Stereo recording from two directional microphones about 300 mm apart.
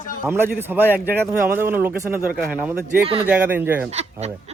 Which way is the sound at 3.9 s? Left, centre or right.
Right.